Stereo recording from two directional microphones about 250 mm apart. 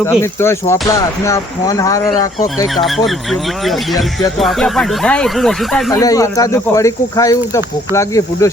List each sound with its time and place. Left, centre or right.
0.0 s speech: centre
2.7 s speech: centre
5.9 s speech: centre